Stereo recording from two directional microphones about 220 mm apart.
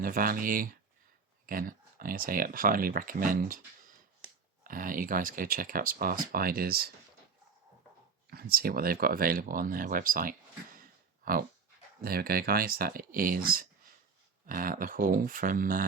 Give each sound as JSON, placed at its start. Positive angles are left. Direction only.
{"t": 0.0, "sound": "speech", "side_deg": -40}
{"t": 4.6, "sound": "speech", "side_deg": -40}
{"t": 8.3, "sound": "speech", "side_deg": -45}